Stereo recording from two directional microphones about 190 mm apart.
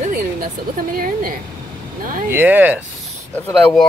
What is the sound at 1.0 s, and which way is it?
A woman's voice, 50° right (ahead or behind).